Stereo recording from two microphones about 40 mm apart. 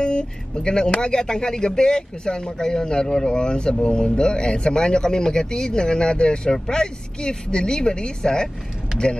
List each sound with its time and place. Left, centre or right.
0.0 s speech: left